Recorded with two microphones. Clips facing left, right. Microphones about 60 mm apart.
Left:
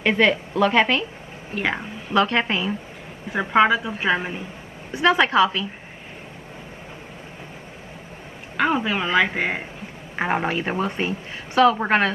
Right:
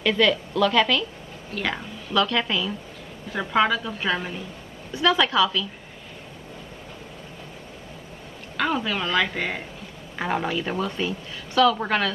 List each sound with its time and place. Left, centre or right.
0.0 s a woman's voice: left
3.3 s a woman's voice: left
8.5 s a woman's voice: left
10.1 s a woman's voice: left